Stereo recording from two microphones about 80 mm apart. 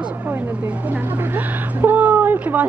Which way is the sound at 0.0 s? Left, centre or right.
Right.